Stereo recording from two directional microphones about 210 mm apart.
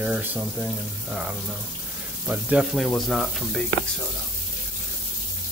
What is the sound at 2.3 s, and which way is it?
Speech, 5° right (ahead or behind).